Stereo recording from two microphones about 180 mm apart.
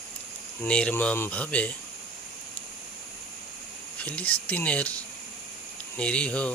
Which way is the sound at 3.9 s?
5° left (ahead or behind).